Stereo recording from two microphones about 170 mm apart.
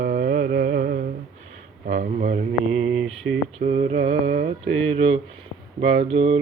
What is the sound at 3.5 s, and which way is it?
Mantra, 35° right (ahead or behind).